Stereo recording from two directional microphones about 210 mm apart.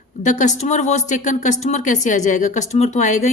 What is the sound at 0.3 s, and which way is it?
Speech, 35° left (ahead or behind).